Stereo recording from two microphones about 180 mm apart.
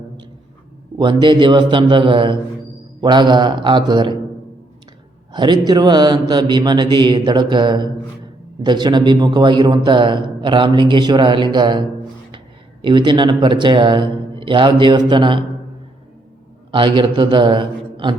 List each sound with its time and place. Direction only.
0.9 s a man's voice: 25° right (ahead or behind)
5.3 s a man's voice: 25° right (ahead or behind)
12.8 s a man's voice: 25° right (ahead or behind)
16.7 s a man's voice: 25° right (ahead or behind)